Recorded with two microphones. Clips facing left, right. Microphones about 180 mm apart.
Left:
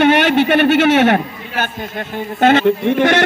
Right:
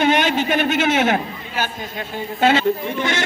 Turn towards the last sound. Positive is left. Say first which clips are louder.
# left 8 dB
turn(degrees=65)  # may be behind; listen again after turning